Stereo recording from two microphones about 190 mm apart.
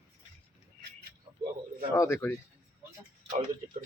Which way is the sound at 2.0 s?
15° left (ahead or behind).